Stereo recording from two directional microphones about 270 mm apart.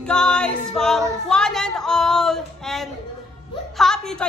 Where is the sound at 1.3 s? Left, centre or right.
Centre.